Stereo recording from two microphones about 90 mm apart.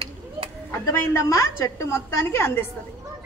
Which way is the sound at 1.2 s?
30° left (ahead or behind).